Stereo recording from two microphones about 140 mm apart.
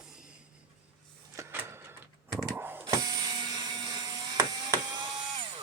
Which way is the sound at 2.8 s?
30° right (ahead or behind).